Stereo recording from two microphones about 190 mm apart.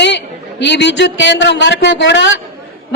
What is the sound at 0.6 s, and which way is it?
A woman's voice, 65° left (ahead or behind).